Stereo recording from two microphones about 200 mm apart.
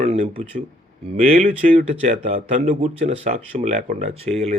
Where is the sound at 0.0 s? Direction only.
30° right (ahead or behind).